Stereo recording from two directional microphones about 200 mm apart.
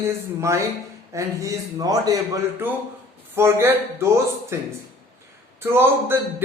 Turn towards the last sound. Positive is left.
turn(degrees=-10)  # may be behind; listen again after turning